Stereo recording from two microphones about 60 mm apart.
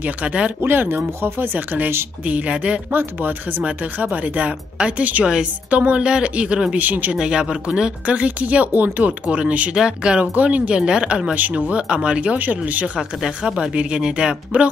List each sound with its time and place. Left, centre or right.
0.0 s speech: right
0.6 s speech: right
2.2 s speech: right
2.9 s speech: right
5.2 s speech: centre
7.2 s speech: centre
11.3 s speech: right
13.2 s speech: centre